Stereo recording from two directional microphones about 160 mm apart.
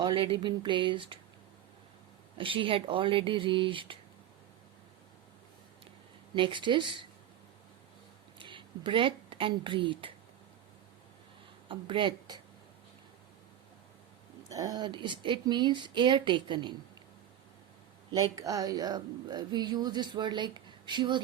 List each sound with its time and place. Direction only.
0.0 s speech: 30° right (ahead or behind)
2.4 s speech: 35° right (ahead or behind)
6.3 s speech: 30° right (ahead or behind)
8.4 s a woman's voice: 30° right (ahead or behind)
11.7 s speech: 30° right (ahead or behind)
14.5 s speech: 20° right (ahead or behind)
18.1 s speech: 20° right (ahead or behind)